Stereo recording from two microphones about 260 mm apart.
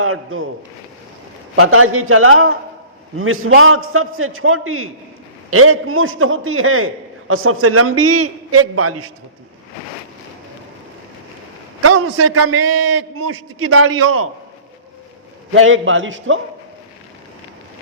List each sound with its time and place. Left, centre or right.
0.0 s a man's voice: right
1.5 s a man's voice: right
11.8 s a man's voice: right
15.5 s a man's voice: right